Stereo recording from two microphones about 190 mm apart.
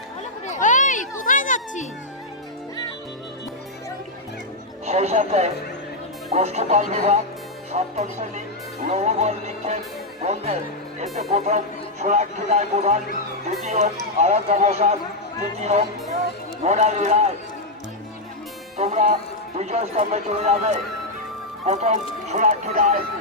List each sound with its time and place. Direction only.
0.4 s a sound: 40° left (ahead or behind)
4.9 s speech: 35° right (ahead or behind)
18.8 s music: 35° right (ahead or behind)
19.5 s speech: 35° right (ahead or behind)